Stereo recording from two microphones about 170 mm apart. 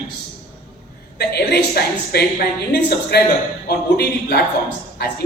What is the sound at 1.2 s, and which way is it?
A man's voice, 70° left (ahead or behind).